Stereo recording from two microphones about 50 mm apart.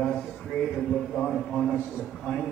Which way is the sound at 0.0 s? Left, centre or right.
Centre.